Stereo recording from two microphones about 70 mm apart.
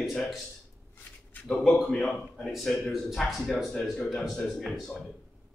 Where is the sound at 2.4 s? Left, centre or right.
Centre.